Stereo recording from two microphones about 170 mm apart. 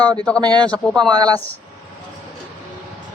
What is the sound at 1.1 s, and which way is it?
Speech, 25° right (ahead or behind).